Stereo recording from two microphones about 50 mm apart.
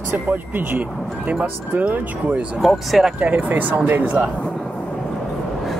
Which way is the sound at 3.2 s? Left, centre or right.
Right.